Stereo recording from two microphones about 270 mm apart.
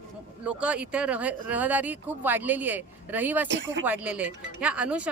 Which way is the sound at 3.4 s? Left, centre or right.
Right.